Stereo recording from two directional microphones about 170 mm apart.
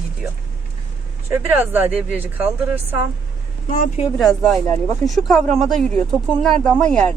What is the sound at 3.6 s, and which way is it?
Speech, 50° left (ahead or behind).